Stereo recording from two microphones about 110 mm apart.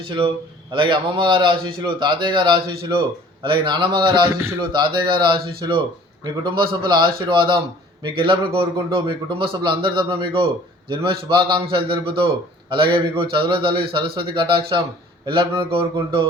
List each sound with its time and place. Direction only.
0.7 s a man's voice: 45° right (ahead or behind)